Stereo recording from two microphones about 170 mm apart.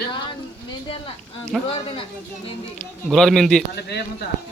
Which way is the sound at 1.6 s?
35° left (ahead or behind).